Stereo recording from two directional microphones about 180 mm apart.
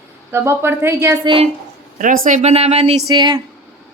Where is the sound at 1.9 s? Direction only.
50° right (ahead or behind).